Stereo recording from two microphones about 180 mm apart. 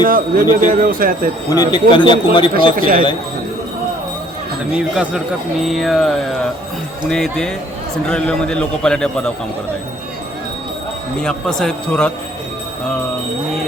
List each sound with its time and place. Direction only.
0.0 s speech: 50° right (ahead or behind)
1.5 s speech: 25° left (ahead or behind)
2.7 s speech: 50° right (ahead or behind)
5.6 s a man's voice: centre (ahead or behind)
11.2 s a man's voice: 5° left (ahead or behind)